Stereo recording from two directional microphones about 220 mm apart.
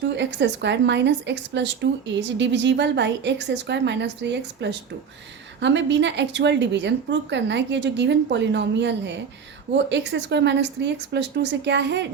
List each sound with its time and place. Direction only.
0.2 s speech: 55° right (ahead or behind)